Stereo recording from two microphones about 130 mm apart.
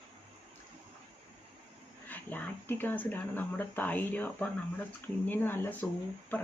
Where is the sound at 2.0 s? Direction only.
15° left (ahead or behind).